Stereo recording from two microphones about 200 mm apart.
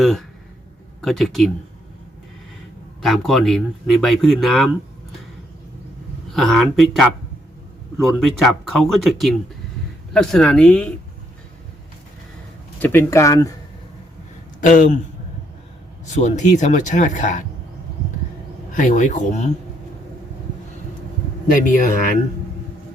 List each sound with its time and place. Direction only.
0.0 s speech: centre (ahead or behind)
3.0 s speech: centre (ahead or behind)
6.3 s speech: centre (ahead or behind)
12.8 s speech: 10° left (ahead or behind)
14.6 s speech: 40° left (ahead or behind)
16.0 s speech: 35° left (ahead or behind)
18.7 s speech: 40° left (ahead or behind)
21.6 s speech: 40° left (ahead or behind)